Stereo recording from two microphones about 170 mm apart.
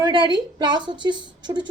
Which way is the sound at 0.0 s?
25° right (ahead or behind).